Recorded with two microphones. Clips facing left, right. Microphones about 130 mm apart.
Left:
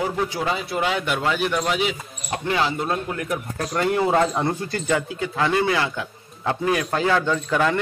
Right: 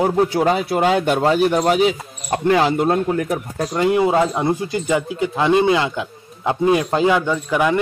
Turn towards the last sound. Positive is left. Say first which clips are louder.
# right 3 dB
turn(degrees=-10)  # may be behind; listen again after turning